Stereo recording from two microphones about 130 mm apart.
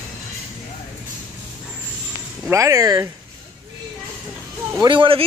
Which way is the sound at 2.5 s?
25° right (ahead or behind).